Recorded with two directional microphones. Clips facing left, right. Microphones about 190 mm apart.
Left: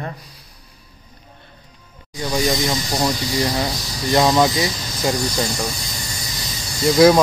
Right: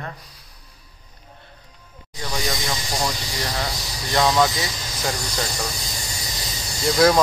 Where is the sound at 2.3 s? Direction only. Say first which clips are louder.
Left 7 dB; 15° left (ahead or behind).